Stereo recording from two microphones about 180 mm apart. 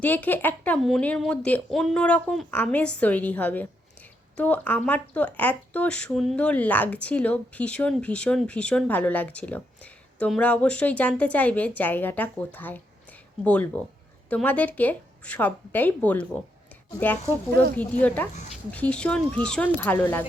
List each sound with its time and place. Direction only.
0.0 s speech: 10° left (ahead or behind)
17.5 s speech: 60° right (ahead or behind)
18.0 s speech: 10° left (ahead or behind)